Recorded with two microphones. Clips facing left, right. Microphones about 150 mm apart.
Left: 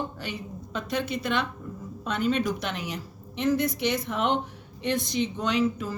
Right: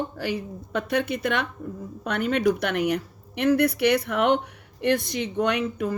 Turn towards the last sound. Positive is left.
turn(degrees=-60)  # may be behind; listen again after turning